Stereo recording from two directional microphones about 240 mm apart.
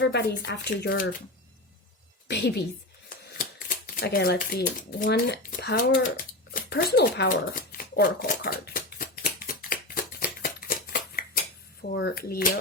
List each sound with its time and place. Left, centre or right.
0.0 s speech: left
2.2 s a woman's voice: left
3.2 s shuffling cards: left
5.0 s speech: left
9.9 s a sound: left
11.9 s speech: left